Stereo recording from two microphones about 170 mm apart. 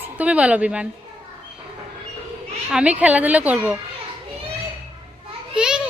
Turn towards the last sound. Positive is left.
turn(degrees=-5)  # may be behind; listen again after turning